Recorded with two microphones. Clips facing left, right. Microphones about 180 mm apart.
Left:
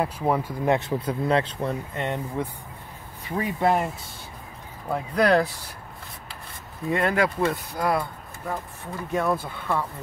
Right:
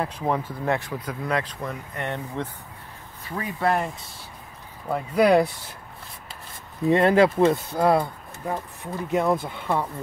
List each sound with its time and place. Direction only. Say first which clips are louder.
0.0 s speech: left 2 dB; 10° left (ahead or behind); by 2.0 s 30° left (ahead or behind)
2.0 s speech: left 1 dB; 10° left (ahead or behind)
4.8 s speech: right 2 dB; 5° right (ahead or behind)
6.9 s speech: right 6 dB; 25° right (ahead or behind)